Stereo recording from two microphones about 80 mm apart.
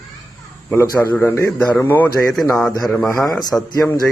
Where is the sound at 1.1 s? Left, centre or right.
Left.